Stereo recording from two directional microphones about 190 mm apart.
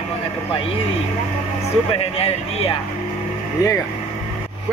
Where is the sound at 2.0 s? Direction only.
30° left (ahead or behind).